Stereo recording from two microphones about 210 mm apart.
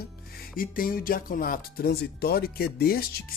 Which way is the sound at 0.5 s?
40° left (ahead or behind).